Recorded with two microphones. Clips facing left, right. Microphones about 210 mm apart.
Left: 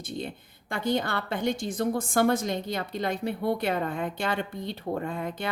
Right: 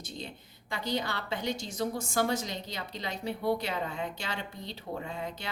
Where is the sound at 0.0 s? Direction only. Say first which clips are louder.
Left 7 dB; 55° left (ahead or behind).